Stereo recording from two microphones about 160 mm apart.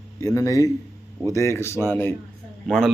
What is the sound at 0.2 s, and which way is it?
A man's voice, 20° left (ahead or behind).